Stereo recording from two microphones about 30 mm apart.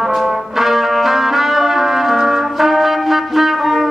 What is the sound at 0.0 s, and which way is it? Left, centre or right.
Brass instrument, centre.